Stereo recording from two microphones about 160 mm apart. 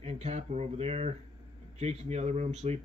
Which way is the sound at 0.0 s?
40° right (ahead or behind).